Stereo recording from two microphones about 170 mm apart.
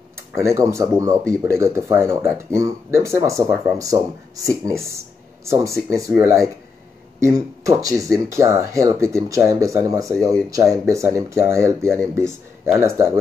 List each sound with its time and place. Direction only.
0.3 s speech: 15° right (ahead or behind)